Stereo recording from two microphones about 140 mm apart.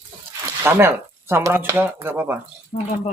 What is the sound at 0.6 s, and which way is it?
Speech, 15° right (ahead or behind).